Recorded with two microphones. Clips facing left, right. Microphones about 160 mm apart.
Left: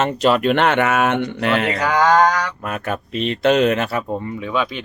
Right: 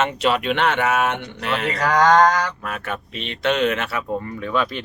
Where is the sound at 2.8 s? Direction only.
40° left (ahead or behind).